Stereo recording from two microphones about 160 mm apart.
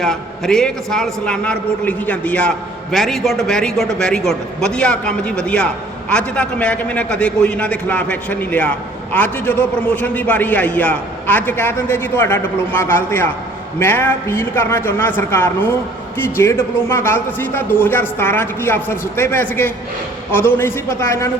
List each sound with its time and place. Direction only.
0.0 s a man's voice: centre (ahead or behind)